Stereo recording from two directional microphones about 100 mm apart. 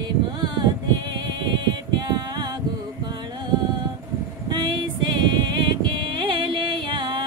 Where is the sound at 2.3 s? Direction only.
50° right (ahead or behind).